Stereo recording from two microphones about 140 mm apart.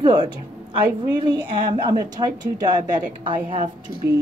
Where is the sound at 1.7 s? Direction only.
30° right (ahead or behind).